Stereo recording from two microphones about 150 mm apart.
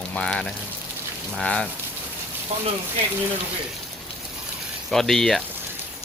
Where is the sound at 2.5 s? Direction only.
45° right (ahead or behind).